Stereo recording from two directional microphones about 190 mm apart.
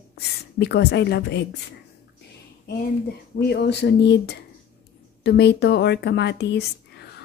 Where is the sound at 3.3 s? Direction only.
60° left (ahead or behind).